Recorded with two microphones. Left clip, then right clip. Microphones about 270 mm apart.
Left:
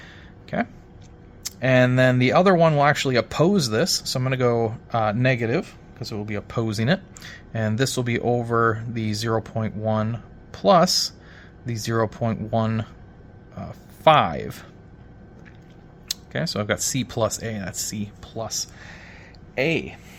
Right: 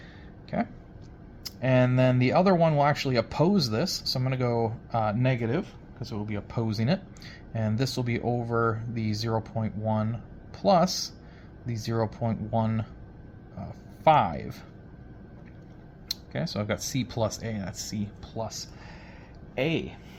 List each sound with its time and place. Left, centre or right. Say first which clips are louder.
0.5 s speech: left 5 dB; left
16.0 s speech: left 6 dB; left